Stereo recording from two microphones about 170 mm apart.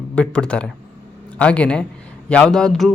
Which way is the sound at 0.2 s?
5° left (ahead or behind).